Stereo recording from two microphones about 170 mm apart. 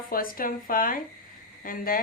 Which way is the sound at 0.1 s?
55° left (ahead or behind).